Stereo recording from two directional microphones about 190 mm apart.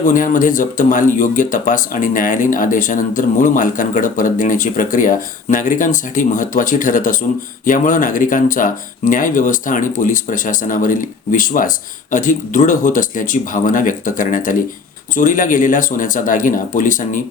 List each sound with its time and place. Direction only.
0.0 s speech: 45° left (ahead or behind)